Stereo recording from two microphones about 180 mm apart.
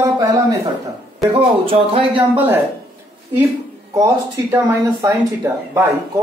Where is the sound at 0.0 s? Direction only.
20° right (ahead or behind).